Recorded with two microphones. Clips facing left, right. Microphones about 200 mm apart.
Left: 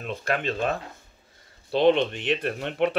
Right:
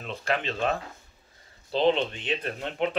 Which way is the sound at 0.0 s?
50° left (ahead or behind).